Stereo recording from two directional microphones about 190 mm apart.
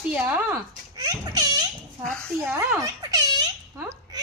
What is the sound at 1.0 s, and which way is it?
Speech, 20° right (ahead or behind).